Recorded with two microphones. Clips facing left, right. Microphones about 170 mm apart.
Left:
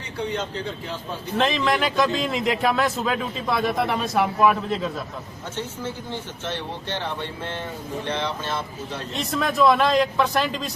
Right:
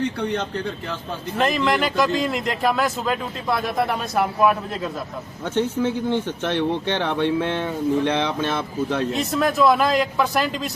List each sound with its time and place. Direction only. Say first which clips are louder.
1.4 s speech: right 1 dB; centre (ahead or behind)
5.5 s speech: right 10 dB; 60° right (ahead or behind)
9.1 s speech: left 1 dB; centre (ahead or behind)